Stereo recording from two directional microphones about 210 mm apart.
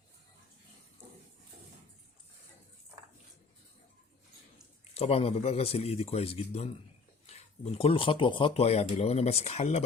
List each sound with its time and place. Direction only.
4.9 s speech: 30° left (ahead or behind)